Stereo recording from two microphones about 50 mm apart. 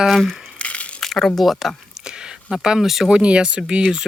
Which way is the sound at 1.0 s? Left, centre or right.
Centre.